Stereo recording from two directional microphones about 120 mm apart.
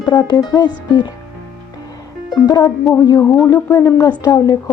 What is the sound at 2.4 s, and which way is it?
Speech, 35° left (ahead or behind).